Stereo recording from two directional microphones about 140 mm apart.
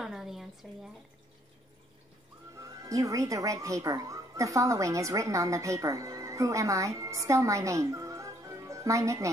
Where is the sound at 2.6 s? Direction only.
25° right (ahead or behind).